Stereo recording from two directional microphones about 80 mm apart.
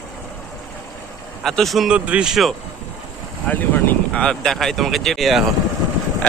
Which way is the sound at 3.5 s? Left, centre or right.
Left.